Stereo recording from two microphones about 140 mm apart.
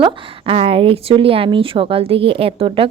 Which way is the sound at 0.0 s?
45° right (ahead or behind).